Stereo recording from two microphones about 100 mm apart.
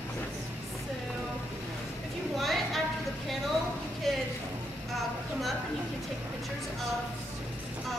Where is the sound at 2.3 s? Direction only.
Centre (ahead or behind).